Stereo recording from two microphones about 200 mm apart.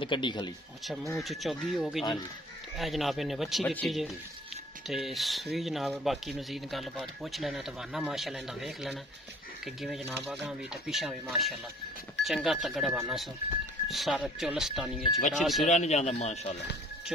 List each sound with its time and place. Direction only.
0.0 s speech: 25° left (ahead or behind)
0.8 s speech: centre (ahead or behind)
15.7 s speech: 35° left (ahead or behind)